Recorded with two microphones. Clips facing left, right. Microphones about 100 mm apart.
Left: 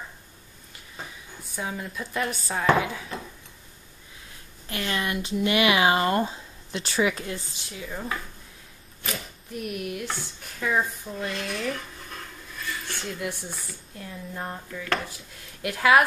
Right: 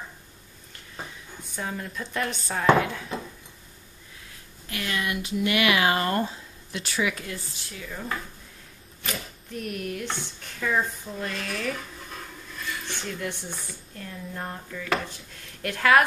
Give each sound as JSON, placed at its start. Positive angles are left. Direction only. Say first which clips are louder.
{"t": 1.5, "sound": "speech", "louder": "even", "side_deg": 5}
{"t": 4.6, "sound": "speech", "louder": "left 1 dB", "side_deg": 30}
{"t": 7.8, "sound": "speech", "louder": "left 2 dB", "side_deg": 20}
{"t": 9.0, "sound": "speech", "louder": "even", "side_deg": 5}